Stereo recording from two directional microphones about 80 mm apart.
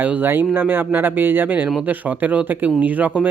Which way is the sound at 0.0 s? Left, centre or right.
Right.